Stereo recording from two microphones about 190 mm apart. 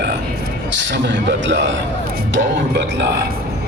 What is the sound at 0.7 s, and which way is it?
Speech, 70° right (ahead or behind).